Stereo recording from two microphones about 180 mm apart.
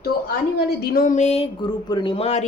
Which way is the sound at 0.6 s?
55° left (ahead or behind).